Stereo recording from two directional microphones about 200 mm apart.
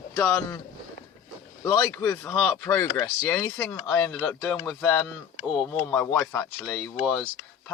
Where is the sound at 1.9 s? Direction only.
15° left (ahead or behind).